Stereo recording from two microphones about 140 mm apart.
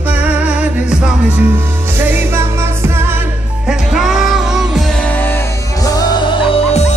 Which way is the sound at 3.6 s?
5° right (ahead or behind).